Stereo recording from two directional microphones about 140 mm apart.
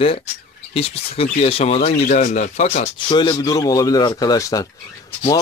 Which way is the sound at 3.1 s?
35° left (ahead or behind).